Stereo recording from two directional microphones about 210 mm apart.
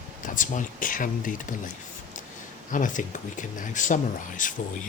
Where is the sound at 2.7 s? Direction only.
40° left (ahead or behind).